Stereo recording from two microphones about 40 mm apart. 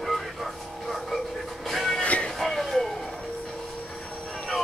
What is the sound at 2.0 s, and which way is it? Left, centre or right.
Music, left.